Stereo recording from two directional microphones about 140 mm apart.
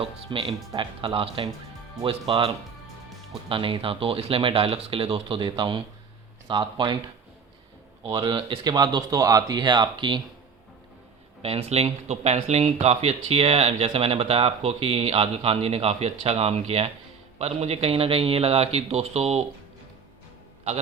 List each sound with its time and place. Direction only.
0.0 s speech: 40° right (ahead or behind)
8.0 s speech: 35° right (ahead or behind)
11.4 s speech: 45° right (ahead or behind)